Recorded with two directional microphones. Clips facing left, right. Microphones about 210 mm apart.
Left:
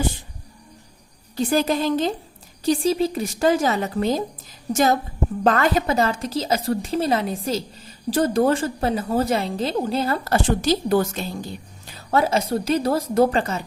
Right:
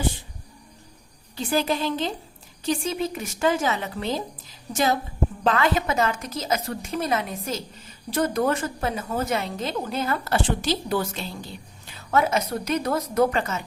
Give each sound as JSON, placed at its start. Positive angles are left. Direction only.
{"t": 1.4, "sound": "a woman's voice", "side_deg": 45}
{"t": 11.9, "sound": "a woman's voice", "side_deg": 35}